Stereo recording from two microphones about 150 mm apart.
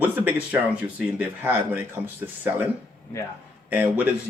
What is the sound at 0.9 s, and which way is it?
Speech, 10° right (ahead or behind).